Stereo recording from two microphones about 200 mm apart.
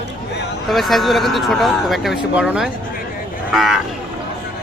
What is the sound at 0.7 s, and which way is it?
Speech, centre (ahead or behind).